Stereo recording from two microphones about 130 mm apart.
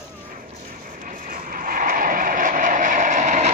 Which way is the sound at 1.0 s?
90° right.